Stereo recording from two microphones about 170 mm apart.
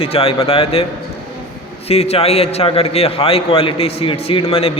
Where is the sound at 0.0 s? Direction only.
35° left (ahead or behind).